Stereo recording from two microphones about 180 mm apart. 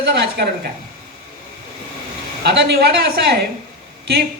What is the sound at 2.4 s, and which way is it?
Speech, 70° right (ahead or behind).